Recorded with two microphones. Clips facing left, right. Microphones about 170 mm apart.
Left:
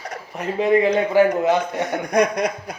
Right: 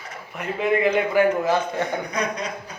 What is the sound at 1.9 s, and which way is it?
Speech, 80° left.